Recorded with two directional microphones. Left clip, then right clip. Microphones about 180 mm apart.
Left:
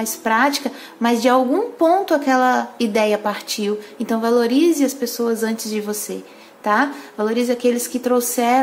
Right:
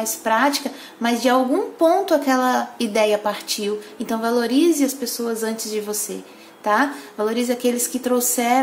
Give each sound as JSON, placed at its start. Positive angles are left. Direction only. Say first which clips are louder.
{"t": 0.0, "sound": "speech", "louder": "left 1 dB", "side_deg": 20}